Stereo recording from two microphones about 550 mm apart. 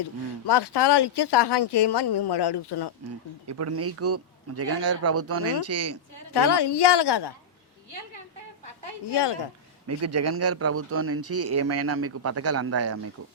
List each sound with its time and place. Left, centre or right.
0.0 s speech: left
3.4 s speech: right
6.3 s speech: left
9.0 s speech: left
9.8 s speech: right